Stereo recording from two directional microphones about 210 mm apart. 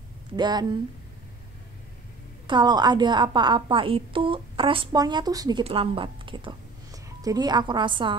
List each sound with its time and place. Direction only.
0.4 s a woman's voice: 20° right (ahead or behind)
2.4 s a woman's voice: 20° right (ahead or behind)